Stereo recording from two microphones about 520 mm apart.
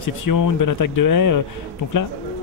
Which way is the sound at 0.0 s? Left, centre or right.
Left.